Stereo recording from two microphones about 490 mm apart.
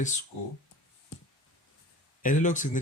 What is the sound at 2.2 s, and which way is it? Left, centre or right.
Speech, centre.